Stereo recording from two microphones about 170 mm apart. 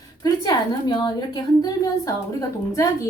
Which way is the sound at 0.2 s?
25° left (ahead or behind).